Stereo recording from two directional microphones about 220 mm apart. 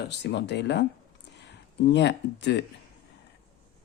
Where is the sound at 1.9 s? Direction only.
50° left (ahead or behind).